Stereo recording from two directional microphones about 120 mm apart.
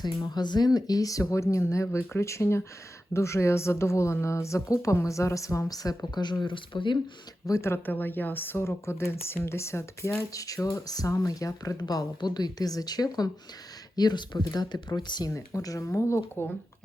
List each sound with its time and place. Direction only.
0.0 s speech: 35° left (ahead or behind)
7.4 s speech: 25° left (ahead or behind)